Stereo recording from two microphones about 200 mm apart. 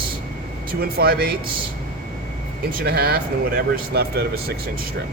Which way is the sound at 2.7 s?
50° right (ahead or behind).